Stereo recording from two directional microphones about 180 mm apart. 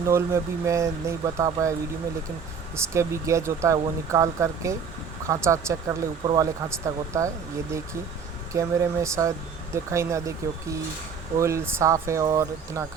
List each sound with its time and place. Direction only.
0.0 s speech: 15° right (ahead or behind)
2.9 s speech: 15° right (ahead or behind)
8.5 s speech: 15° right (ahead or behind)